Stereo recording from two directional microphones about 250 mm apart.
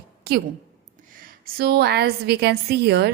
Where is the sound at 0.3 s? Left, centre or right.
Right.